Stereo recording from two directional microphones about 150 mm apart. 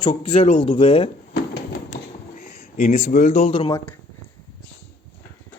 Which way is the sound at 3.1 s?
60° left (ahead or behind).